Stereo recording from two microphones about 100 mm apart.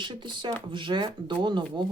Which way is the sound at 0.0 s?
50° right (ahead or behind).